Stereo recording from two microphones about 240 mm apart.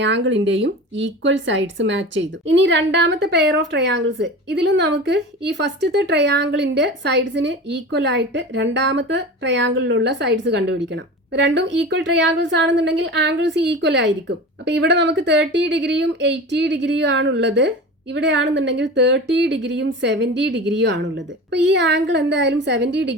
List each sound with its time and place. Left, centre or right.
0.0 s speech: right